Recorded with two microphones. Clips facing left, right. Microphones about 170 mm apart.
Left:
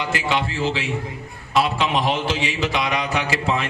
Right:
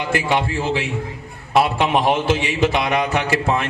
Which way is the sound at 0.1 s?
50° right (ahead or behind).